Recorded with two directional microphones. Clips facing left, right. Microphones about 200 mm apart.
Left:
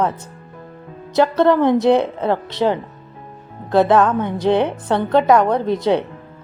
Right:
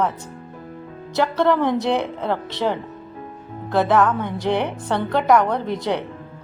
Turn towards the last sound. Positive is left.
turn(degrees=20)  # may be behind; listen again after turning